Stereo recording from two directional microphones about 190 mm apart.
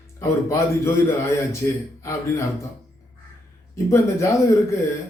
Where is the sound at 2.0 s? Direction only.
15° left (ahead or behind).